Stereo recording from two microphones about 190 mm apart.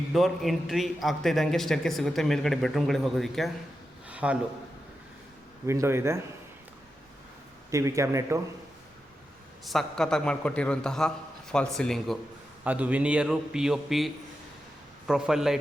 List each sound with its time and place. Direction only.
0.1 s a man's voice: centre (ahead or behind)
5.6 s speech: 15° right (ahead or behind)
7.7 s speech: 15° right (ahead or behind)
9.6 s a man's voice: centre (ahead or behind)